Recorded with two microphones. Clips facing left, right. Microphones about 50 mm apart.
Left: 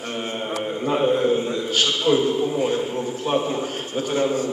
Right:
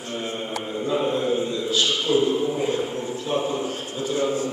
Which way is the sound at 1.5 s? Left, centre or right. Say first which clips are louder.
Left 1 dB; left.